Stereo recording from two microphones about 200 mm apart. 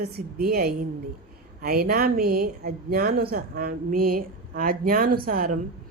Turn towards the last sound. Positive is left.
turn(degrees=-45)  # may be behind; listen again after turning